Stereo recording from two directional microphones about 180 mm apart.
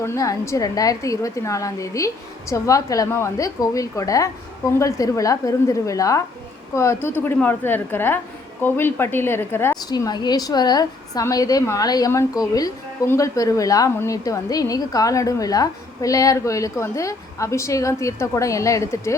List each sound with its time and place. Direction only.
0.0 s a woman's voice: 15° left (ahead or behind)